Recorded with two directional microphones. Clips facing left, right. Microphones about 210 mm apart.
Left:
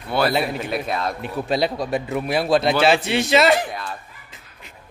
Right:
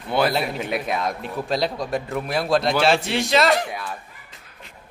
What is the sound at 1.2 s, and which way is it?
A man's voice, 5° left (ahead or behind).